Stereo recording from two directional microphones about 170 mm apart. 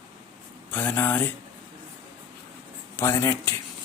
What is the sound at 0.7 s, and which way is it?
Speech, 10° left (ahead or behind).